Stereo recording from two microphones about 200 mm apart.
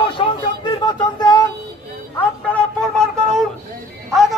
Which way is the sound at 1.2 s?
20° left (ahead or behind).